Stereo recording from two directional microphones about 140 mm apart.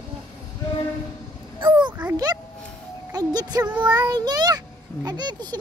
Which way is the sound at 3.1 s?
25° right (ahead or behind).